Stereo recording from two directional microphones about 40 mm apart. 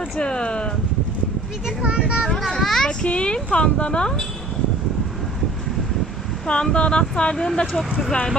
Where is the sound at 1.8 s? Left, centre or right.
Right.